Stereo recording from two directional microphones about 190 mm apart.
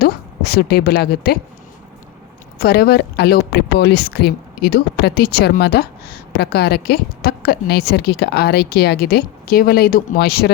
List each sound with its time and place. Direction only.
0.0 s a woman's voice: 55° left (ahead or behind)
2.6 s a woman's voice: 55° left (ahead or behind)